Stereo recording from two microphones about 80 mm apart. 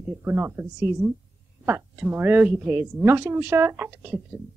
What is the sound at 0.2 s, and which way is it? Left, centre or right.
A woman's voice, right.